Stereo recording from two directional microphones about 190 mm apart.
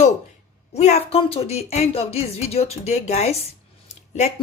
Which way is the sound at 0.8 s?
35° left (ahead or behind).